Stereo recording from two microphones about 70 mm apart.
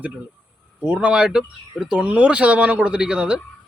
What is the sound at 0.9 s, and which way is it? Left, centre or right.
A man's voice, centre.